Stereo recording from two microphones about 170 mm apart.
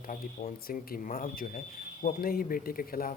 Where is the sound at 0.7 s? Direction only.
55° left (ahead or behind).